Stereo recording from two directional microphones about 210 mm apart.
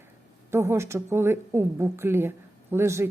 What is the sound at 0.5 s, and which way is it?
A woman's voice, 10° right (ahead or behind).